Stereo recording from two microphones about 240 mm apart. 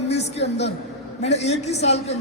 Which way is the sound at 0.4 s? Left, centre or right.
Left.